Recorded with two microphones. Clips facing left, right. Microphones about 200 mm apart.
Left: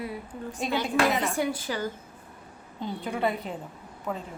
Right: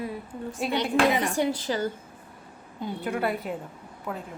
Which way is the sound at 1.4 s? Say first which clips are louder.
Right 3 dB; 25° right (ahead or behind).